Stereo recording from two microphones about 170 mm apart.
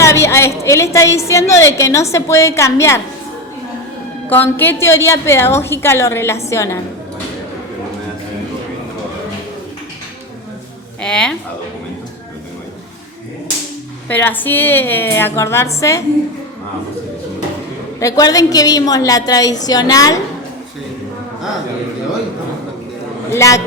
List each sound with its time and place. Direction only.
0.0 s a woman's voice: 15° left (ahead or behind)
4.3 s a woman's voice: 10° left (ahead or behind)
11.0 s speech: 5° left (ahead or behind)
14.1 s a woman's voice: 10° left (ahead or behind)
18.0 s a woman's voice: 20° left (ahead or behind)
23.3 s a woman's voice: 20° left (ahead or behind)